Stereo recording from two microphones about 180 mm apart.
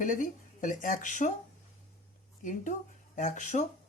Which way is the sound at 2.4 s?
45° left (ahead or behind).